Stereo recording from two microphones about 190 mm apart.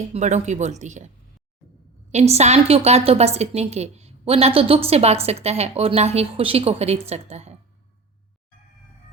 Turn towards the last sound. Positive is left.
turn(degrees=-35)  # may be behind; listen again after turning